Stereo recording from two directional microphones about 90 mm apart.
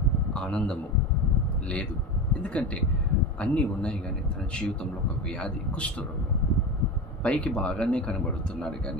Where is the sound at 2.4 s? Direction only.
15° left (ahead or behind).